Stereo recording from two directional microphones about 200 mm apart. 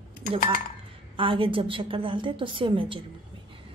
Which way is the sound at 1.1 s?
25° right (ahead or behind).